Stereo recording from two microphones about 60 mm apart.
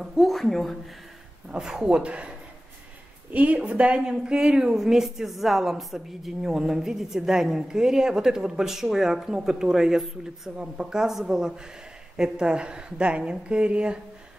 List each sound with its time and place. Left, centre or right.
0.0 s speech: centre
1.5 s a woman's voice: centre
3.3 s a woman's voice: right